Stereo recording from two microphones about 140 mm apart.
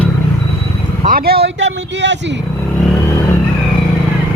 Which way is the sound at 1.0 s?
90° right.